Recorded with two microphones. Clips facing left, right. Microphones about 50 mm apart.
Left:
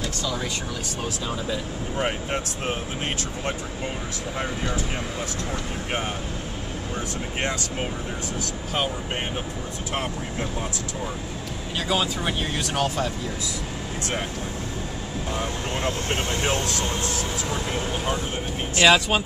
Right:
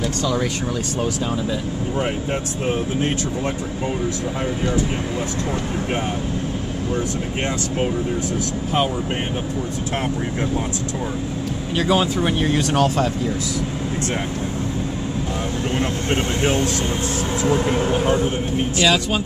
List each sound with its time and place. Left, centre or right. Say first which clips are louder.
11.8 s speech: right 6 dB; right
12.4 s speech: right 8 dB; right
16.1 s speech: right 7 dB; right
18.8 s speech: left 2 dB; centre